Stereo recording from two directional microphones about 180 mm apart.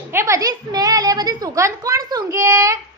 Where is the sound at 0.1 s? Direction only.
15° right (ahead or behind).